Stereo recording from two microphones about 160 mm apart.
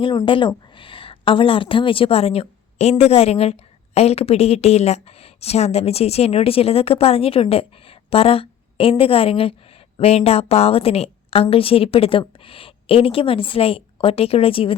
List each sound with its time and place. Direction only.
0.0 s a woman's voice: 30° left (ahead or behind)